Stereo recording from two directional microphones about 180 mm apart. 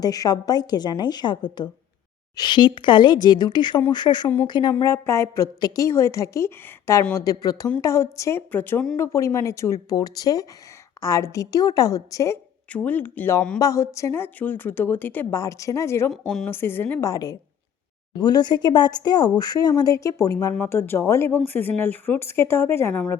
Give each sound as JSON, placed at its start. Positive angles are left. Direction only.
{"t": 0.0, "sound": "a woman's voice", "side_deg": 20}
{"t": 16.2, "sound": "a woman's voice", "side_deg": 0}
{"t": 16.5, "sound": "a woman's voice", "side_deg": 10}